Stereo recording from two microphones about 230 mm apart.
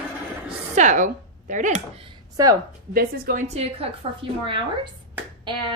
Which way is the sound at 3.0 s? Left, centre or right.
Right.